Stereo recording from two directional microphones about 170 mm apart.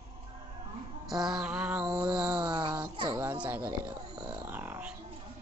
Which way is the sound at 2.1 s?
5° right (ahead or behind).